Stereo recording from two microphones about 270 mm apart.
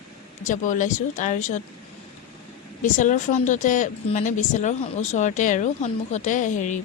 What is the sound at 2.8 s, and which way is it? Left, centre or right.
A woman's voice, left.